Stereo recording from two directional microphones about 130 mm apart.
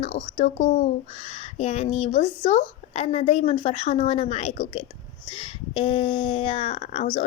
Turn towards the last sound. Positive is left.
turn(degrees=50)  # may be behind; listen again after turning